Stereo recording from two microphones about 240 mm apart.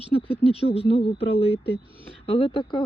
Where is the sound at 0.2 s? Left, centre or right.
Left.